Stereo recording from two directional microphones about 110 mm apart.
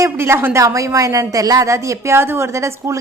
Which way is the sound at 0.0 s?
25° right (ahead or behind).